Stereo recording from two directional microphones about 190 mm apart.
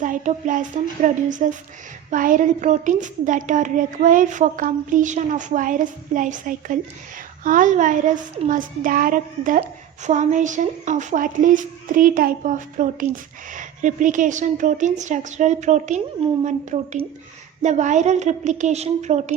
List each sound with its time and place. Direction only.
0.0 s a woman's voice: 45° right (ahead or behind)